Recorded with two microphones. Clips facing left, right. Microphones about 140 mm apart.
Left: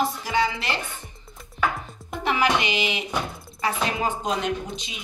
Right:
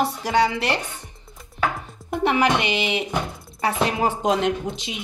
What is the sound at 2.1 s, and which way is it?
Speech, 60° right (ahead or behind).